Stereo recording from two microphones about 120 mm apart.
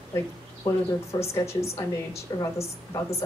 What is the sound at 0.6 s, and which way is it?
A woman's voice, 30° left (ahead or behind).